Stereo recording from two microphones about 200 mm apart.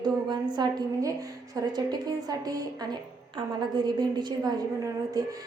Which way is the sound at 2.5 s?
20° right (ahead or behind).